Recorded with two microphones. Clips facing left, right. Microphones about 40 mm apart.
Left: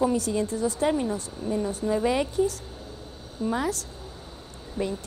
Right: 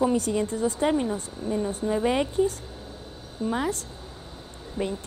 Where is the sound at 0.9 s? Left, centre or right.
Centre.